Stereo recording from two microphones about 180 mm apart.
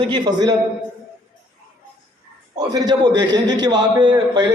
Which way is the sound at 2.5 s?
20° right (ahead or behind).